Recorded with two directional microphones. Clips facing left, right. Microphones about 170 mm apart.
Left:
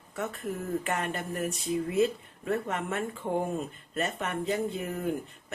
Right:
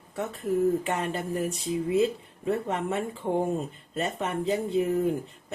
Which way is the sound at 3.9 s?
30° right (ahead or behind).